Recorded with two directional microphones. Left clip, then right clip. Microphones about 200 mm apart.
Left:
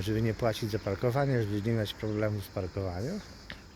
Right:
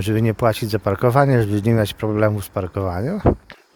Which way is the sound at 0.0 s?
50° right (ahead or behind).